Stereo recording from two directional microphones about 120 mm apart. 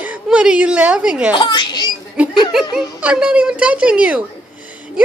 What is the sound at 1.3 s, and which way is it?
Speech, 40° left (ahead or behind).